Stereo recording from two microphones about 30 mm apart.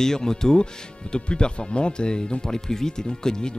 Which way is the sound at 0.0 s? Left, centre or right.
Centre.